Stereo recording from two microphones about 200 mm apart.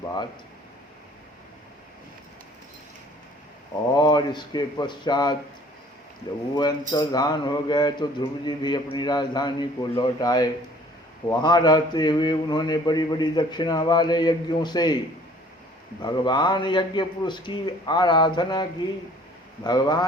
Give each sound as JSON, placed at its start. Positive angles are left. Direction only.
{"t": 3.9, "sound": "a man's voice", "side_deg": 20}
{"t": 6.6, "sound": "a man's voice", "side_deg": 20}
{"t": 16.0, "sound": "a man's voice", "side_deg": 20}
{"t": 19.6, "sound": "a man's voice", "side_deg": 20}